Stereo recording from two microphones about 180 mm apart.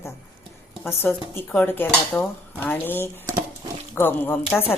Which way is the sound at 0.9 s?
15° left (ahead or behind).